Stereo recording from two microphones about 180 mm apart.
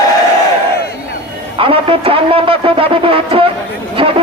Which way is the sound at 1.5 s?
30° right (ahead or behind).